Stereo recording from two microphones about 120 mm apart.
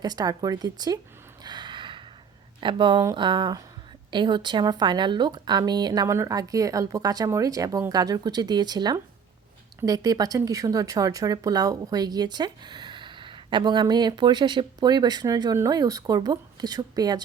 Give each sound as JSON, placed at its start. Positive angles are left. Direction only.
{"t": 0.0, "sound": "speech", "side_deg": -35}
{"t": 1.5, "sound": "gasp", "side_deg": -40}
{"t": 2.6, "sound": "speech", "side_deg": -45}